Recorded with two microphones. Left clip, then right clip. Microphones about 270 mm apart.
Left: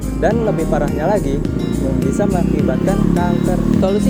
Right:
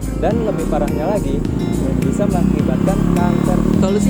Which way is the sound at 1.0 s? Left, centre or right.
Centre.